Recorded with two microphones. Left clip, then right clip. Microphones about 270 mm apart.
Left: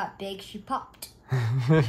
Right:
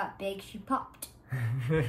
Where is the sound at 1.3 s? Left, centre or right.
Centre.